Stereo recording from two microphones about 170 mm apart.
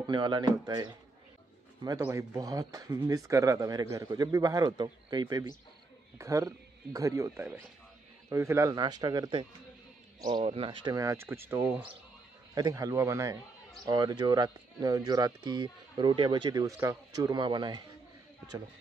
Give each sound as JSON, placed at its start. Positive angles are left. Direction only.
{"t": 0.0, "sound": "speech", "side_deg": -25}
{"t": 2.0, "sound": "speech", "side_deg": -15}